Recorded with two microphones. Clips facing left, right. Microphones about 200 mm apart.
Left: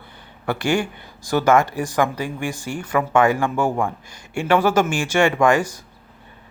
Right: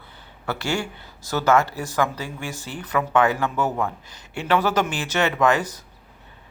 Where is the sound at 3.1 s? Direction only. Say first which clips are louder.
Left 3 dB; 10° left (ahead or behind).